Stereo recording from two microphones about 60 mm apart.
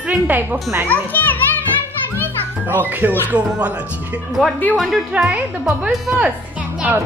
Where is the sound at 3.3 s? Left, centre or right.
Right.